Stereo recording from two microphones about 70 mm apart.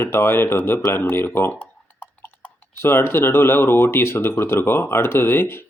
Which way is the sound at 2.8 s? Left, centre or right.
Left.